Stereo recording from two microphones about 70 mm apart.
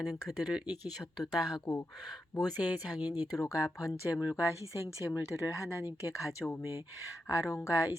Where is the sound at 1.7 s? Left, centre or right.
Left.